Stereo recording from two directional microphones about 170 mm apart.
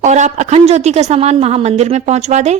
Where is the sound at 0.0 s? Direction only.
45° right (ahead or behind).